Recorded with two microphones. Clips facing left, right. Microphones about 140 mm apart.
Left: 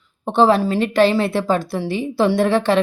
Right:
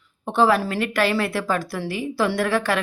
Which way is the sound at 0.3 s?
25° left (ahead or behind).